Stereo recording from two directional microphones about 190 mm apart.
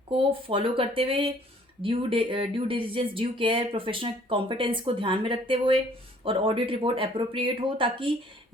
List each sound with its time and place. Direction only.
0.1 s speech: 30° right (ahead or behind)